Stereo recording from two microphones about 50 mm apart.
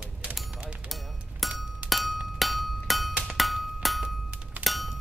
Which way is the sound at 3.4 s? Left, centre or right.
Centre.